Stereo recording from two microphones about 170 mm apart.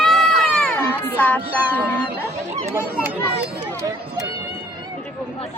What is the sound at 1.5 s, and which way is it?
Speech, 10° left (ahead or behind).